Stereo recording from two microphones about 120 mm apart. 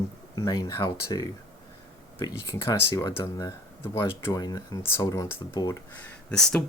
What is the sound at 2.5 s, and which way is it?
Speech, 25° left (ahead or behind).